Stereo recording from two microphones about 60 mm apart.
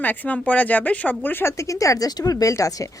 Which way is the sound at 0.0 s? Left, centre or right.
Left.